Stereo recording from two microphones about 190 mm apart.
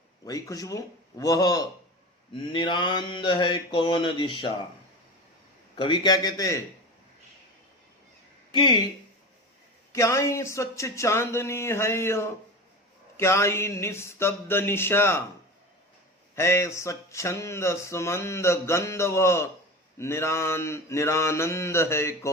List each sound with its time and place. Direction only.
0.3 s mantra: 20° left (ahead or behind)
5.7 s mantra: 25° left (ahead or behind)
8.5 s mantra: 25° left (ahead or behind)
9.9 s speech: 15° left (ahead or behind)
16.3 s speech: 15° left (ahead or behind)